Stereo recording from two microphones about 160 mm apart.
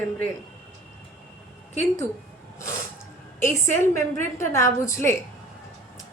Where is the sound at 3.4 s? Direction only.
15° left (ahead or behind).